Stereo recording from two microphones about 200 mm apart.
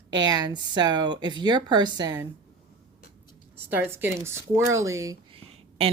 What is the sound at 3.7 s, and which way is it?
Speech, 10° right (ahead or behind).